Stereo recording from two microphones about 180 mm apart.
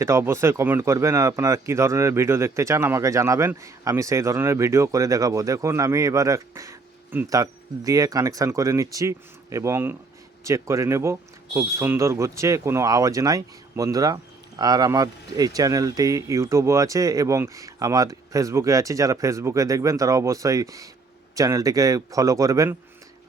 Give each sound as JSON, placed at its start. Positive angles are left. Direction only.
{"t": 0.0, "sound": "a man's voice", "side_deg": -15}